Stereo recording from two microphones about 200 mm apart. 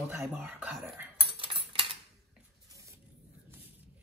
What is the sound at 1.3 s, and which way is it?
Cutlery, 25° right (ahead or behind).